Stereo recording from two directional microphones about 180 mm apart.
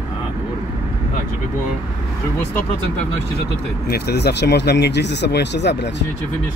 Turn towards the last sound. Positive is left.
turn(degrees=70)  # may be behind; listen again after turning